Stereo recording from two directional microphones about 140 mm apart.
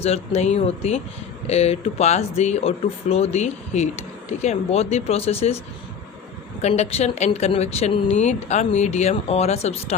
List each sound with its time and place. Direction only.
0.0 s speech: 50° left (ahead or behind)
6.6 s speech: 50° left (ahead or behind)